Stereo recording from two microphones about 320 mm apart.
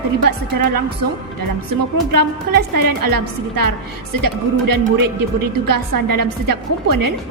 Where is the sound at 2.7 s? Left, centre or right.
Right.